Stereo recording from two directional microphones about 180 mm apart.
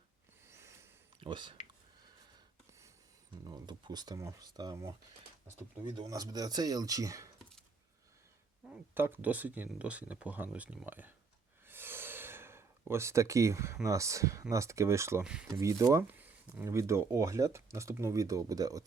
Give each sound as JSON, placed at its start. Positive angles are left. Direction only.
{"t": 0.4, "sound": "snort", "side_deg": -15}
{"t": 1.2, "sound": "speech", "side_deg": -25}
{"t": 3.4, "sound": "speech", "side_deg": -25}
{"t": 6.0, "sound": "speech", "side_deg": -20}
{"t": 8.7, "sound": "speech", "side_deg": -10}
{"t": 11.6, "sound": "gasp", "side_deg": -10}
{"t": 13.8, "sound": "speech", "side_deg": -15}
{"t": 15.2, "sound": "speech", "side_deg": -5}
{"t": 15.5, "sound": "speech", "side_deg": -20}